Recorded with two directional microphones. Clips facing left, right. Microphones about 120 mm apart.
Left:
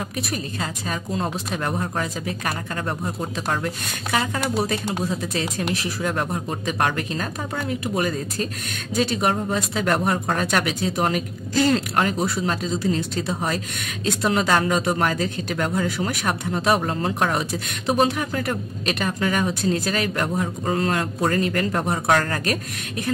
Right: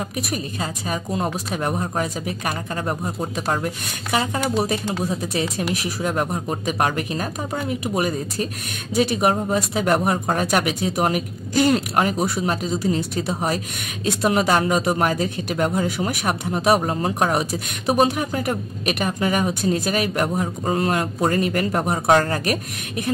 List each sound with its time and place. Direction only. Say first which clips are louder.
0.6 s a man's voice: right 2 dB; 15° right (ahead or behind)
6.0 s a man's voice: right 2 dB; 15° right (ahead or behind)